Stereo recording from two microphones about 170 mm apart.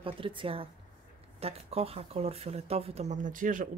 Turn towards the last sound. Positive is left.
turn(degrees=-50)  # may be behind; listen again after turning